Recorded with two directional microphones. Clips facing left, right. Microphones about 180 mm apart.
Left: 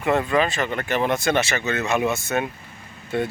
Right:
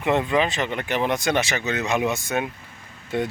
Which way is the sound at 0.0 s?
20° right (ahead or behind).